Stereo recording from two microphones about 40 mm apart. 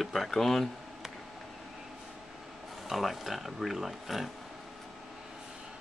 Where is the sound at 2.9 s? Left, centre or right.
Centre.